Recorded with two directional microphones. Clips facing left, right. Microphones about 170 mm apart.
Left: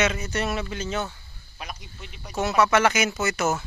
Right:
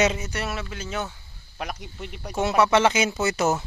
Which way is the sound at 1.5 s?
60° right (ahead or behind).